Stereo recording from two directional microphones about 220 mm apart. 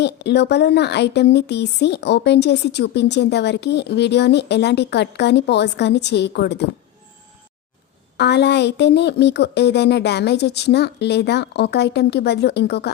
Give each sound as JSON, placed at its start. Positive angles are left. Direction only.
{"t": 0.0, "sound": "speech", "side_deg": 50}
{"t": 8.1, "sound": "speech", "side_deg": 50}